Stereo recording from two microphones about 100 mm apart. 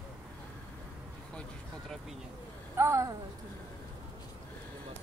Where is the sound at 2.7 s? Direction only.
30° right (ahead or behind).